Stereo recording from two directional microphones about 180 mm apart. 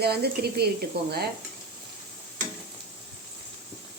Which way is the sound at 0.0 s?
60° right (ahead or behind).